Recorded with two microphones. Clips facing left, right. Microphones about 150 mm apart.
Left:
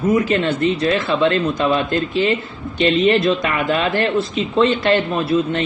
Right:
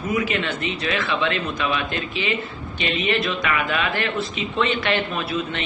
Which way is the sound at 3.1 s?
35° left (ahead or behind).